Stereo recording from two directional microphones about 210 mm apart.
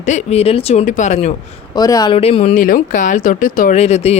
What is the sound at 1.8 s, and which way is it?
Speech, 15° left (ahead or behind).